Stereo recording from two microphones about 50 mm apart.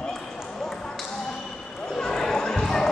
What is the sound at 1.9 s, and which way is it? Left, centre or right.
Basketball bounce, centre.